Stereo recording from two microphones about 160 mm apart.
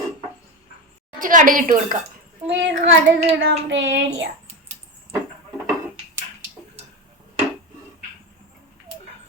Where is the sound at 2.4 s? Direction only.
90° right.